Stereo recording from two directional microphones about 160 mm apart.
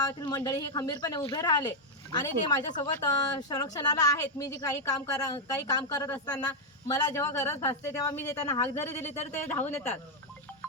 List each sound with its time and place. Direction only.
0.0 s a woman's voice: 25° left (ahead or behind)
2.7 s a woman's voice: 25° left (ahead or behind)